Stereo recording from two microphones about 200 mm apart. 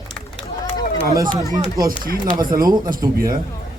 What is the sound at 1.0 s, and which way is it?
Speech, 15° right (ahead or behind).